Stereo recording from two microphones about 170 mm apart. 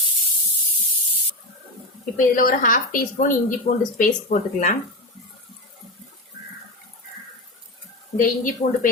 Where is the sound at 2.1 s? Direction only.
55° left (ahead or behind).